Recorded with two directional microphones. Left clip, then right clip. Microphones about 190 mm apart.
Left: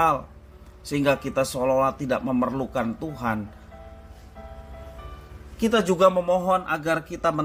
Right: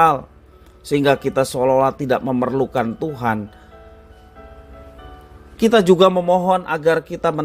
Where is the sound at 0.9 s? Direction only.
50° right (ahead or behind).